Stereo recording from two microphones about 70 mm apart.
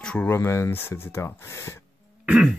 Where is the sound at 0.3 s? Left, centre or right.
Left.